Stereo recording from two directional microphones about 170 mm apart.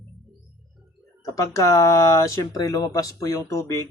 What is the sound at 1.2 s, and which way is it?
Speech, 20° left (ahead or behind).